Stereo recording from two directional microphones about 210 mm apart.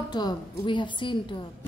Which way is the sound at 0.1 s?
20° left (ahead or behind).